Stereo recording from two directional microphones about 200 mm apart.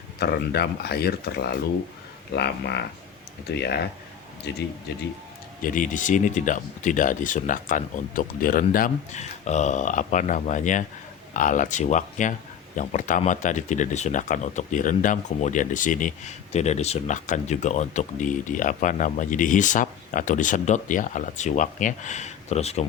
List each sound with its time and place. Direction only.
0.2 s speech: 55° left (ahead or behind)
5.6 s speech: 40° left (ahead or behind)